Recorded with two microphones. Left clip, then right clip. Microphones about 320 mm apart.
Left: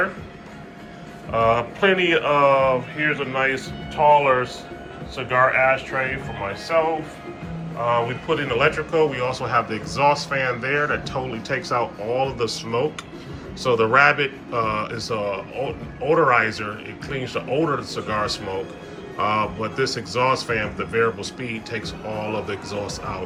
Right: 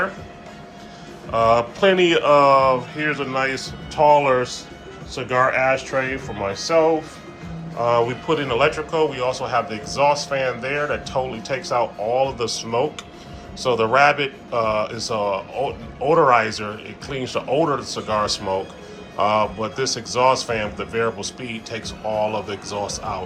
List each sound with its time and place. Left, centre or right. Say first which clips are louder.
1.3 s a man's voice: right 2 dB; centre